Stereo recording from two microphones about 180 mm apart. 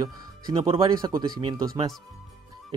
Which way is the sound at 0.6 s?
30° right (ahead or behind).